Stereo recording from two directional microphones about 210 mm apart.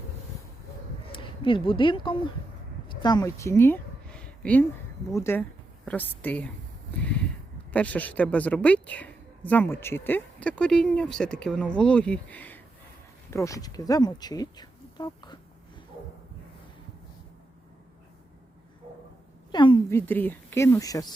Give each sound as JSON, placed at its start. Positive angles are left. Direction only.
{"t": 1.1, "sound": "speech", "side_deg": 25}
{"t": 2.9, "sound": "a sound", "side_deg": 20}
{"t": 5.1, "sound": "speech", "side_deg": 10}
{"t": 7.0, "sound": "a sound", "side_deg": 5}
{"t": 7.7, "sound": "a woman's voice", "side_deg": 5}
{"t": 19.5, "sound": "speech", "side_deg": 20}